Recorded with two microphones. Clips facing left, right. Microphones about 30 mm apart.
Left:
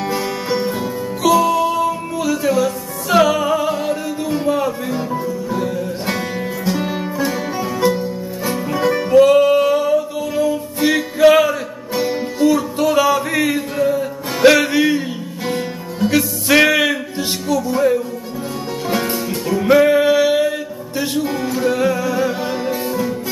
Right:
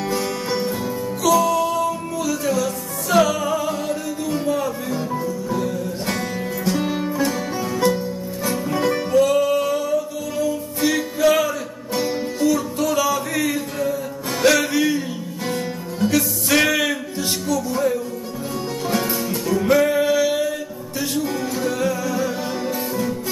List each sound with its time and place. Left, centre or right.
0.0 s music: centre
9.1 s music: left